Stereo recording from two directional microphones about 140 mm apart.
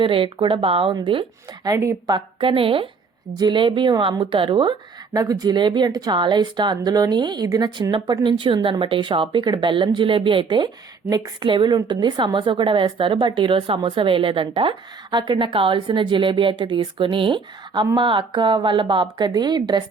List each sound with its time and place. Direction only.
0.0 s a woman's voice: 40° right (ahead or behind)
1.6 s a woman's voice: 25° right (ahead or behind)
2.1 s a woman's voice: 40° right (ahead or behind)
5.1 s a woman's voice: 25° right (ahead or behind)